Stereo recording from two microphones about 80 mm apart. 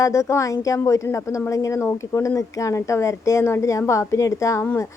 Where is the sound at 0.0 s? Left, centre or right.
Left.